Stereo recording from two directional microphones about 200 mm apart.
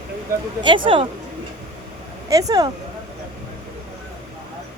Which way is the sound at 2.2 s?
15° right (ahead or behind).